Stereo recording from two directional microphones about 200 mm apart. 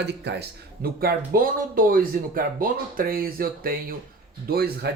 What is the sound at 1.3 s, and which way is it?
Speech, 45° right (ahead or behind).